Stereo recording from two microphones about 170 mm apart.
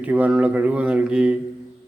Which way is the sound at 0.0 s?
10° right (ahead or behind).